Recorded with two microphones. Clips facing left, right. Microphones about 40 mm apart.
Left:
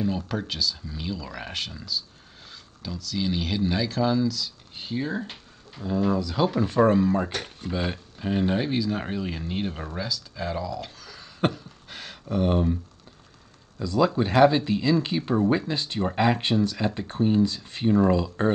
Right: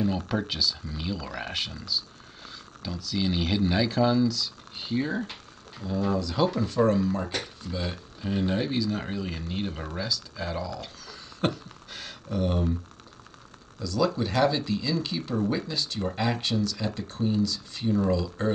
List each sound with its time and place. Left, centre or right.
0.3 s speech: centre
5.8 s speech: left
6.0 s speech: centre
6.6 s speech: left
9.9 s speech: centre
10.8 s a sound: centre
12.3 s speech: left
13.7 s speech: left